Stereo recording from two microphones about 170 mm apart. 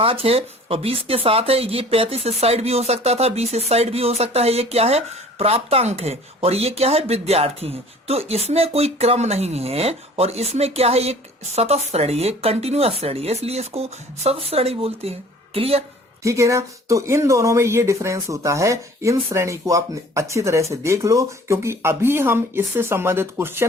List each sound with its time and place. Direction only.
0.0 s speech: 35° right (ahead or behind)
16.2 s speech: 15° right (ahead or behind)